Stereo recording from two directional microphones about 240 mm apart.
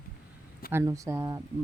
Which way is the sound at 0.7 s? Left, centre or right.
Centre.